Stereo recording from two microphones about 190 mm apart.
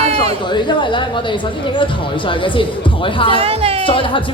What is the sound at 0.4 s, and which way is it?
Speech, 25° left (ahead or behind).